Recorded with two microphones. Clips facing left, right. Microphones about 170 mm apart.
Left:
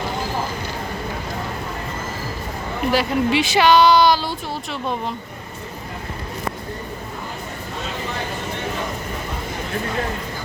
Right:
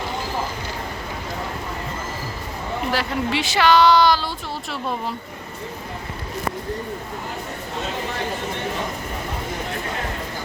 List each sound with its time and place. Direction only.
2.9 s speech: 15° left (ahead or behind)